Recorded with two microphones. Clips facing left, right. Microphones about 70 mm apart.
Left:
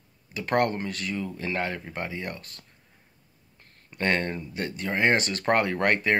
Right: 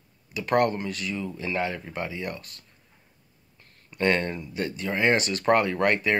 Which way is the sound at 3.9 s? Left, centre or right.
Left.